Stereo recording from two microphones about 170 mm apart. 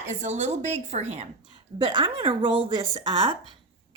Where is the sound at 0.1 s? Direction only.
45° right (ahead or behind).